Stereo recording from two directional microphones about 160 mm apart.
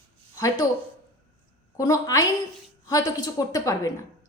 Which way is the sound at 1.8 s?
20° left (ahead or behind).